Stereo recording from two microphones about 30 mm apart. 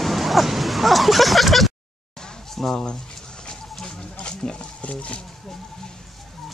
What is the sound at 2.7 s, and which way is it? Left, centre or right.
Speech, left.